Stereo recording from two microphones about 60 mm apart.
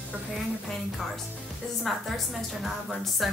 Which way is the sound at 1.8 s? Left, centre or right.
Centre.